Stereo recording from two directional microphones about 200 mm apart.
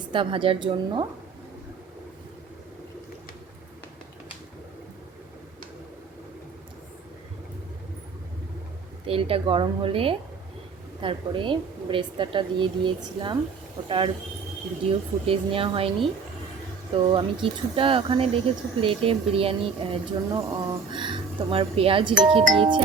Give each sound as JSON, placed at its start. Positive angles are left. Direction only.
{"t": 0.1, "sound": "speech", "side_deg": -25}
{"t": 9.0, "sound": "speech", "side_deg": -30}